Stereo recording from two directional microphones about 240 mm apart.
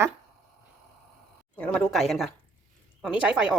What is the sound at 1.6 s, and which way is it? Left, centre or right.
A woman's voice, centre.